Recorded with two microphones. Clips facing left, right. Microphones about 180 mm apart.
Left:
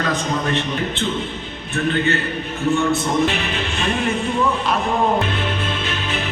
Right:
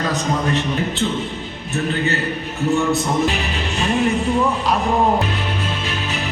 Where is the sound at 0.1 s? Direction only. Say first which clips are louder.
Right 1 dB; 40° right (ahead or behind).